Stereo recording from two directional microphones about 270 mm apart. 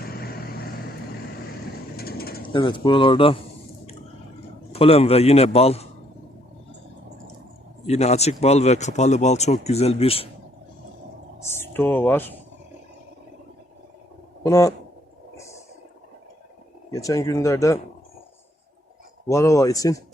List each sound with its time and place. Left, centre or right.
0.0 s vehicle: left
2.0 s mechanisms: left
2.5 s speech: centre
4.7 s speech: left
7.9 s speech: left
11.5 s speech: centre
14.4 s speech: centre
16.9 s speech: centre
19.3 s speech: centre